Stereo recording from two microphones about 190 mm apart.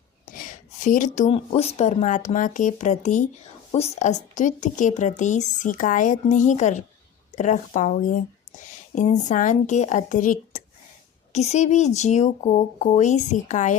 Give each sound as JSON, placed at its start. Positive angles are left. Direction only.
{"t": 0.3, "sound": "speech", "side_deg": 45}